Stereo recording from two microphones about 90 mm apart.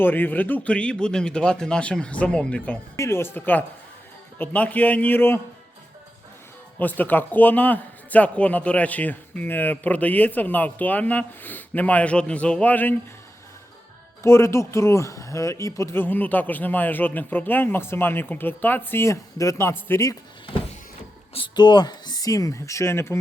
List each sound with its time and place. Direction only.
0.0 s a man's voice: 20° left (ahead or behind)
6.7 s a man's voice: 20° left (ahead or behind)
14.2 s a man's voice: 30° left (ahead or behind)
21.5 s speech: 50° left (ahead or behind); by 23.1 s 30° left (ahead or behind)